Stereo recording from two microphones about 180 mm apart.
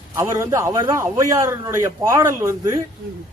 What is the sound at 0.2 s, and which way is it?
A man's voice, 15° right (ahead or behind).